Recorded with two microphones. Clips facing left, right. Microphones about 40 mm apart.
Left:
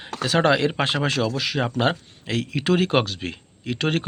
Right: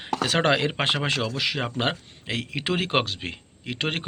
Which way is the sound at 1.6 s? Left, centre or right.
Right.